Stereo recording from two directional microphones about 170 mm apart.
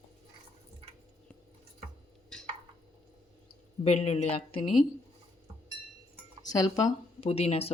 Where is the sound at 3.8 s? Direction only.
40° left (ahead or behind).